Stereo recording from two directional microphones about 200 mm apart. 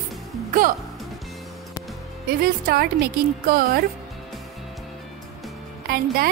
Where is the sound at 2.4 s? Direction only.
50° right (ahead or behind).